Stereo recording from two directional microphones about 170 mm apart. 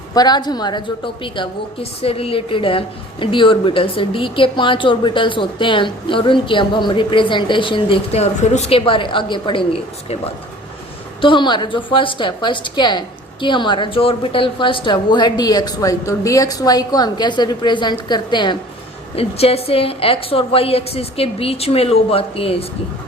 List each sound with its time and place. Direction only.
0.1 s a woman's voice: 25° left (ahead or behind)
11.2 s a woman's voice: 30° left (ahead or behind)